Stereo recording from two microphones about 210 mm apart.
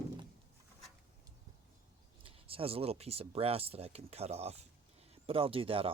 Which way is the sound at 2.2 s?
25° right (ahead or behind).